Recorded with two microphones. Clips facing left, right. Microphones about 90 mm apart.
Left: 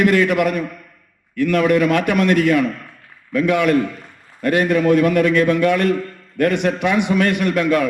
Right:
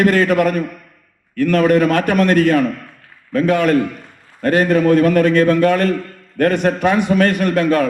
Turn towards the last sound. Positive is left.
turn(degrees=-40)  # may be behind; listen again after turning